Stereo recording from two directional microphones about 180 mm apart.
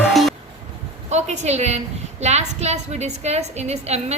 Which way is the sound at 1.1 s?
40° right (ahead or behind).